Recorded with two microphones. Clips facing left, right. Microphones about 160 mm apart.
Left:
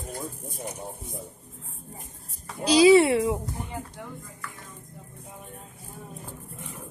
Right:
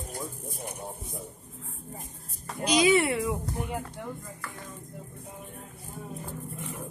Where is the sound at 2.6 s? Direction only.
30° left (ahead or behind).